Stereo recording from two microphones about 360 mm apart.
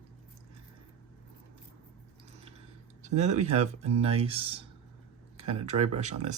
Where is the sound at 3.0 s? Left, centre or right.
Centre.